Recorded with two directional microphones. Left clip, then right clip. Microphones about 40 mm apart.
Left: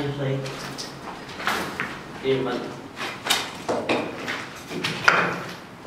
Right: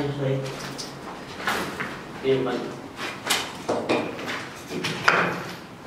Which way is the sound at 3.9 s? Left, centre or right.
Centre.